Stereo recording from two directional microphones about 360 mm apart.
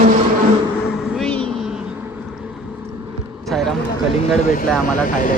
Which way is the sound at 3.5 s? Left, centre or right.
Centre.